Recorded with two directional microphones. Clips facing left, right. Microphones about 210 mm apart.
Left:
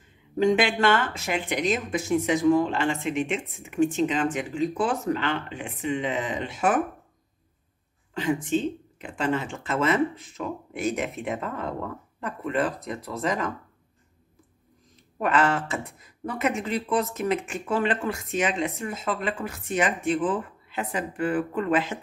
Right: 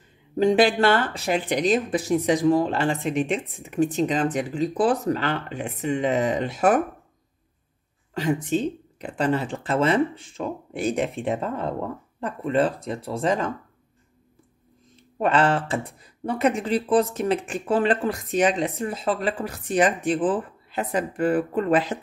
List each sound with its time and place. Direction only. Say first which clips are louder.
0.4 s speech: right 3 dB; 35° right (ahead or behind)
8.1 s speech: right 1 dB; 40° right (ahead or behind)
15.1 s speech: right 3 dB; 30° right (ahead or behind)